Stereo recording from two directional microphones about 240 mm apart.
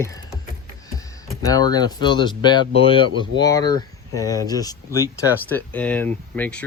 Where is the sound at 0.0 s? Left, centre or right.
Centre.